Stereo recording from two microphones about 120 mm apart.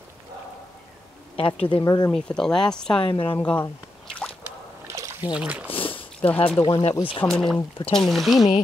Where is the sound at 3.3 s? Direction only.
15° left (ahead or behind).